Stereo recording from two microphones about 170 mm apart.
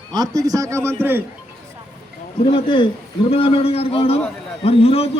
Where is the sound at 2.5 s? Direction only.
30° left (ahead or behind).